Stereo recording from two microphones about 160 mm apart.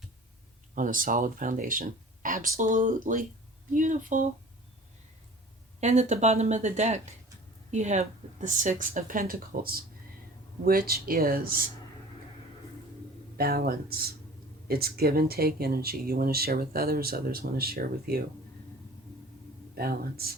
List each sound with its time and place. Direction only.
0.8 s a woman's voice: 60° right (ahead or behind)
5.8 s a woman's voice: 45° right (ahead or behind); by 11.7 s 65° right (ahead or behind)
13.3 s speech: 70° right (ahead or behind)
19.7 s speech: 70° right (ahead or behind)